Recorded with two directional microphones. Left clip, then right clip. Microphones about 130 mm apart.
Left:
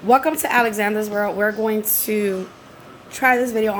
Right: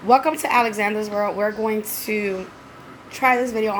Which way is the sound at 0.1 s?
15° left (ahead or behind).